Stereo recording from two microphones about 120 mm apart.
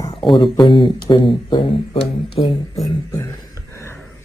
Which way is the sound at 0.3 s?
40° left (ahead or behind).